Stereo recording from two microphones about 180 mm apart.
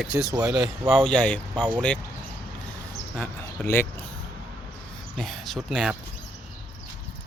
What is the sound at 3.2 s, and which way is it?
Speech, 10° left (ahead or behind).